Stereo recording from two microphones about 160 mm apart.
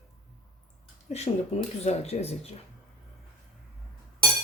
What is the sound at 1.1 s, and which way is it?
Speech, 40° left (ahead or behind).